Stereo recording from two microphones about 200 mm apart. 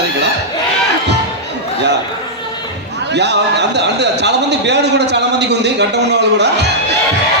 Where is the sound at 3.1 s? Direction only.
60° right (ahead or behind).